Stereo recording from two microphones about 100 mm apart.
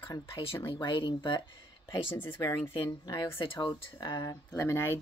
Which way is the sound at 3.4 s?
45° left (ahead or behind).